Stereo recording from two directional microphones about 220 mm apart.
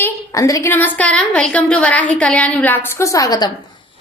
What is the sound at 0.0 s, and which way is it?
A woman's voice, 15° left (ahead or behind).